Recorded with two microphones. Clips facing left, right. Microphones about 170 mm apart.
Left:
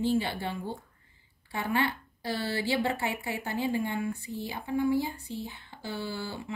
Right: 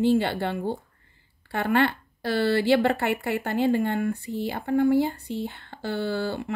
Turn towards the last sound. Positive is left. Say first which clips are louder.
# right 9 dB
turn(degrees=-65)  # may be behind; listen again after turning